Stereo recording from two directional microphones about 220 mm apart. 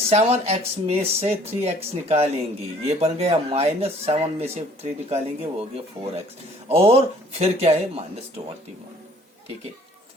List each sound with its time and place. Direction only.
0.1 s speech: 30° right (ahead or behind)